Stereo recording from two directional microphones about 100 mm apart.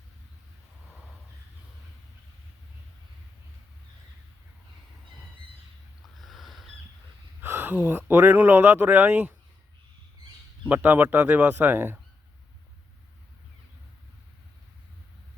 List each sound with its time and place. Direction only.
6.1 s a sound: centre (ahead or behind)
7.4 s speech: 20° right (ahead or behind)
10.7 s speech: 15° right (ahead or behind)